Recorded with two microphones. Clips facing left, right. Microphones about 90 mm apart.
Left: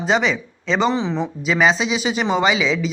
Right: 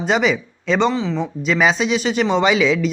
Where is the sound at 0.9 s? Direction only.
20° left (ahead or behind).